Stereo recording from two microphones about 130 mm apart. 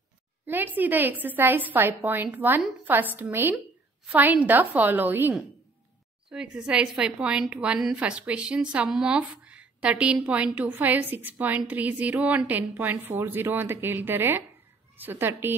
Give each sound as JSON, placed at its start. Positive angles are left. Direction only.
{"t": 0.5, "sound": "a woman's voice", "side_deg": -15}
{"t": 6.3, "sound": "a woman's voice", "side_deg": -5}